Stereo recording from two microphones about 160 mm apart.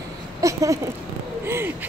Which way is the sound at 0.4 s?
20° right (ahead or behind).